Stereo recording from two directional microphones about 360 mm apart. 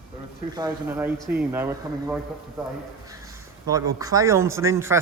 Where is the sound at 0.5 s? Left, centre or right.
Centre.